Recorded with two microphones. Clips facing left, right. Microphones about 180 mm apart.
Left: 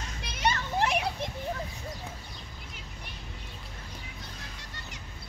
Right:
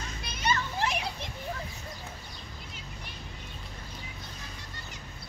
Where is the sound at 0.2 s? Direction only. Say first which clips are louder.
Left 1 dB; 75° left (ahead or behind); by 1.3 s 55° left (ahead or behind).